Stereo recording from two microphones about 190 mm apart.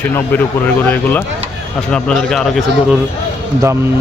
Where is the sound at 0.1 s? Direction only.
10° left (ahead or behind).